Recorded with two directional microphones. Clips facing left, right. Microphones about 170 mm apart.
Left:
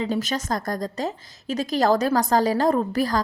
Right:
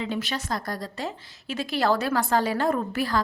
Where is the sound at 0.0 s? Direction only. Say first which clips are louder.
Left 4 dB; 40° left (ahead or behind).